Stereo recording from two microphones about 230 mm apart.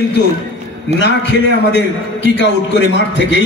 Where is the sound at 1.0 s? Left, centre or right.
Left.